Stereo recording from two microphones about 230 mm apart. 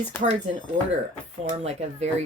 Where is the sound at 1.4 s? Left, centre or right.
Right.